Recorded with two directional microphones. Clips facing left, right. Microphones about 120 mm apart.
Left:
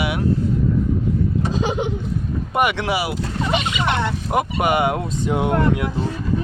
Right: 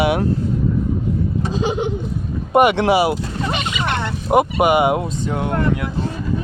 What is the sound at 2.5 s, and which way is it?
Speech, 25° right (ahead or behind).